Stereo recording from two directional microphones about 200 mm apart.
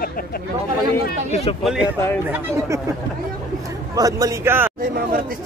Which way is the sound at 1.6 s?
5° right (ahead or behind).